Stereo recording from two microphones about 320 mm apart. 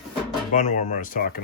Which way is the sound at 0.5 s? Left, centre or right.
Left.